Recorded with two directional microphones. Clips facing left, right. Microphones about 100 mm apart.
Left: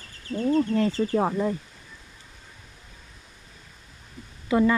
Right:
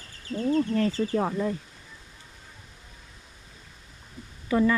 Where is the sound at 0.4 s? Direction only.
30° left (ahead or behind).